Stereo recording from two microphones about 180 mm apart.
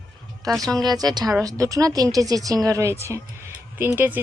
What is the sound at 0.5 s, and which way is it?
Speech, centre (ahead or behind).